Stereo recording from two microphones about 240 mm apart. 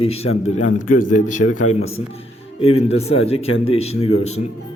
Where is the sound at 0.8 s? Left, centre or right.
Left.